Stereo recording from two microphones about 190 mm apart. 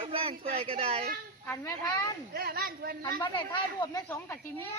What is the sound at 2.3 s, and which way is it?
Speech, 50° right (ahead or behind).